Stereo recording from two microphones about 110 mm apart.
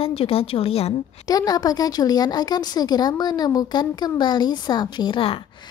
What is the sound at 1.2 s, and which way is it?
A woman's voice, 35° left (ahead or behind).